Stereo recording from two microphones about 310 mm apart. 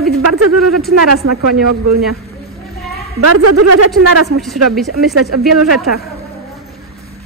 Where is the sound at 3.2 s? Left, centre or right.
Right.